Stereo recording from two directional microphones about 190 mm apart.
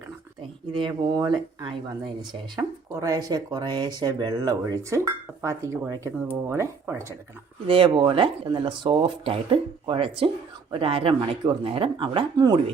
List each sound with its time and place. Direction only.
0.7 s speech: 25° right (ahead or behind)
7.7 s speech: 25° right (ahead or behind)